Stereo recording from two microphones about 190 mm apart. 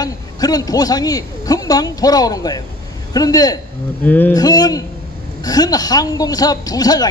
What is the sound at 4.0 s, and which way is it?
Speech, 10° left (ahead or behind).